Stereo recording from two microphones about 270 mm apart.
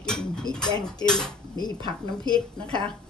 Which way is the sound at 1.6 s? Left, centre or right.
Centre.